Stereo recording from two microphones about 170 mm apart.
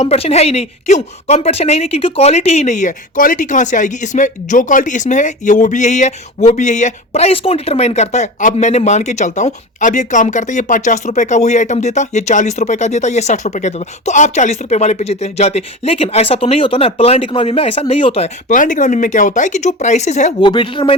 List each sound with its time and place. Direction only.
0.0 s speech: 40° left (ahead or behind)
18.4 s speech: 50° left (ahead or behind)
20.4 s speech: 30° left (ahead or behind)